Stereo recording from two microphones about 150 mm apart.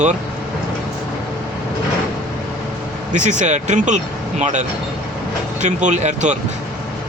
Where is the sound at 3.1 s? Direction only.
55° right (ahead or behind).